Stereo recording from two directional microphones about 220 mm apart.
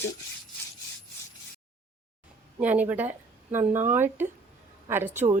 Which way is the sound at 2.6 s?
5° right (ahead or behind).